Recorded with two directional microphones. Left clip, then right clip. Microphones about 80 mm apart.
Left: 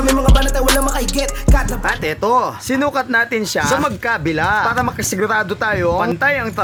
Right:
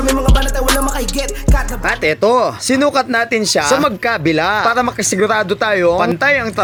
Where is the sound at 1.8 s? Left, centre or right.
Right.